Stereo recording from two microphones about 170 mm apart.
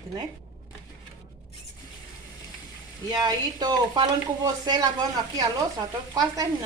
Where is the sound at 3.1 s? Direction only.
25° right (ahead or behind).